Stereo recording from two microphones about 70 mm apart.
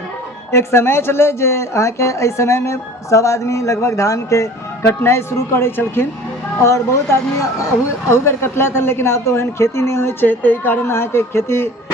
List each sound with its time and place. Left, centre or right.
0.5 s speech: left
4.9 s speech: left